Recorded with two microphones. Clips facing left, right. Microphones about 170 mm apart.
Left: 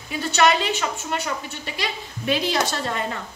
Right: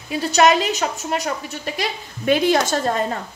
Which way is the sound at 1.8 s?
50° right (ahead or behind).